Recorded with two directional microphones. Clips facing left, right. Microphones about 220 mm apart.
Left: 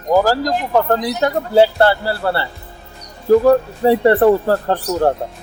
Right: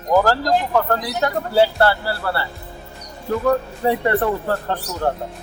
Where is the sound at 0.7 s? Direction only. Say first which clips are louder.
Left 4 dB; 25° left (ahead or behind).